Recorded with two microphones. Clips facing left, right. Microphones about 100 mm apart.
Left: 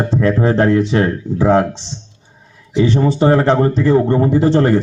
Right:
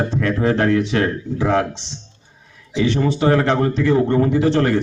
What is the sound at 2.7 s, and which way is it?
A man's voice, 30° left (ahead or behind).